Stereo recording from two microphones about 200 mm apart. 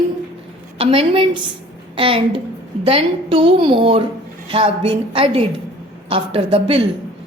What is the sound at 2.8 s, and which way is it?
A woman's voice, 30° right (ahead or behind).